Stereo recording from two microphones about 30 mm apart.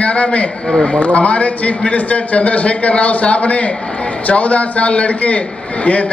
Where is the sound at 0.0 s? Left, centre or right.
Left.